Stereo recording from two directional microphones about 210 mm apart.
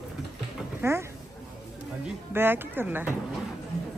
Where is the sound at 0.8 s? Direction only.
10° right (ahead or behind).